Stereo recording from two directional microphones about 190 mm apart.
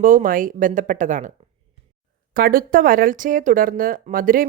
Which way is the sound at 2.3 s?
50° right (ahead or behind).